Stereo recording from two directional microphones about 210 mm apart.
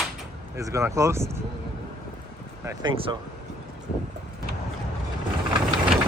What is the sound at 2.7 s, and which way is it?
Speech, 25° right (ahead or behind).